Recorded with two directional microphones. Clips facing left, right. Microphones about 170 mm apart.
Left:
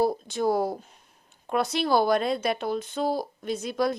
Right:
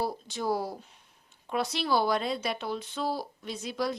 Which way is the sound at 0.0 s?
50° left (ahead or behind).